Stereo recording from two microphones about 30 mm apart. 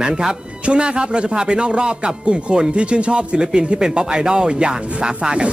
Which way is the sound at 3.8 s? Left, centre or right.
Right.